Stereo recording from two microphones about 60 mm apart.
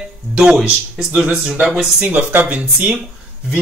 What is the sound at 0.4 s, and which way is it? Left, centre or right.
Speech, centre.